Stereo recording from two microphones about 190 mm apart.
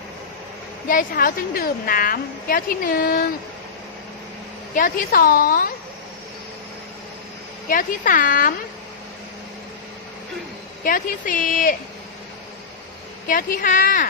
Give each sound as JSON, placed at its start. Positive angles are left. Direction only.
{"t": 0.9, "sound": "a woman's voice", "side_deg": 50}
{"t": 4.7, "sound": "a woman's voice", "side_deg": 45}
{"t": 7.7, "sound": "a woman's voice", "side_deg": 45}
{"t": 10.8, "sound": "a woman's voice", "side_deg": 45}
{"t": 13.2, "sound": "a woman's voice", "side_deg": 45}